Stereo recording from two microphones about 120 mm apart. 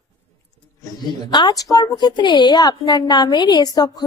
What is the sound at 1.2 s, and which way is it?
A woman's voice, 40° left (ahead or behind).